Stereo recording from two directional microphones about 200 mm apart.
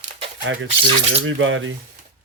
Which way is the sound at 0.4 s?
75° right (ahead or behind).